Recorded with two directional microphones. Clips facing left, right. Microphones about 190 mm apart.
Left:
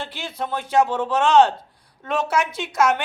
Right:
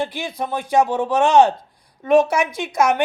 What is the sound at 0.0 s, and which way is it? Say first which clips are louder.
Speech: right 5 dB; 15° right (ahead or behind).